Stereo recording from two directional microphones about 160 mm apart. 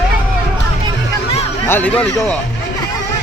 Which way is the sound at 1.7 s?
10° left (ahead or behind).